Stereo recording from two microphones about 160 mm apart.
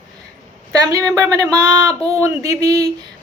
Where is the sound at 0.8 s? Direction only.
20° right (ahead or behind).